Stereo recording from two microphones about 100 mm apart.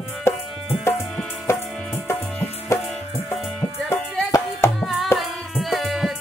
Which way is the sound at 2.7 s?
25° left (ahead or behind).